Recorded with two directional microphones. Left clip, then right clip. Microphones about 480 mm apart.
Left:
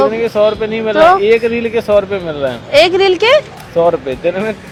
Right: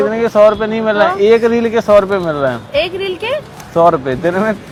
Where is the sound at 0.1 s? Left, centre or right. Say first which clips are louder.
Right 3 dB; right.